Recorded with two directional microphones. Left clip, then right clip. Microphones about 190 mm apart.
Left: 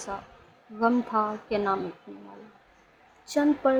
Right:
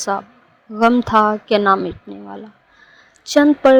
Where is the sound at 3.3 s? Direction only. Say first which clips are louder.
Right 12 dB; 40° right (ahead or behind).